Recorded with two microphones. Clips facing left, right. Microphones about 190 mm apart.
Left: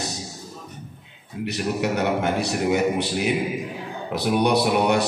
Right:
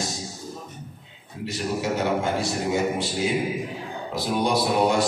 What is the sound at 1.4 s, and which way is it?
A man's voice, 65° left (ahead or behind).